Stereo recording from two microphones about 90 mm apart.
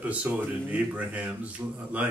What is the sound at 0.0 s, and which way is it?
Speech, 15° right (ahead or behind).